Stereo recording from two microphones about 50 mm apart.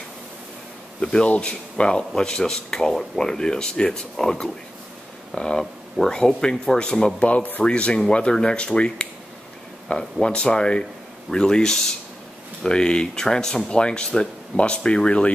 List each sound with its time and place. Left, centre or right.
1.0 s speech: left
7.2 s speech: left
7.6 s speech: left